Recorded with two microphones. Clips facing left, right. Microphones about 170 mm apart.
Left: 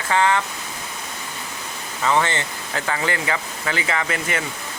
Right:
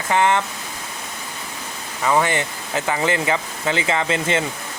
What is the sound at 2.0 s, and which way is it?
Speech, 10° right (ahead or behind).